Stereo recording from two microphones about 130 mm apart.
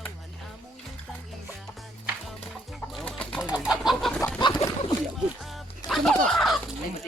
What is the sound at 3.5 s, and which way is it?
Bird, 5° right (ahead or behind).